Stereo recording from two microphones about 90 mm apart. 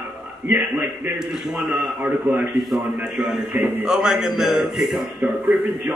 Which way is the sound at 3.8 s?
5° right (ahead or behind).